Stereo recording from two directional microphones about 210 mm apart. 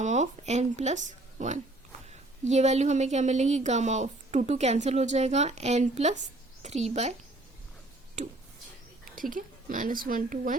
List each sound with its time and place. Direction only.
0.0 s a woman's voice: 35° right (ahead or behind)
9.3 s a woman's voice: 40° right (ahead or behind)